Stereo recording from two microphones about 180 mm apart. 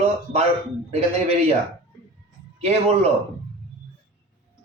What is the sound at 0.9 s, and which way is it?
Speech, 35° right (ahead or behind).